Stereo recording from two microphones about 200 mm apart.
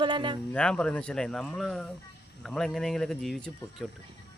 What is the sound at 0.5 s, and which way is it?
Speech, 5° left (ahead or behind).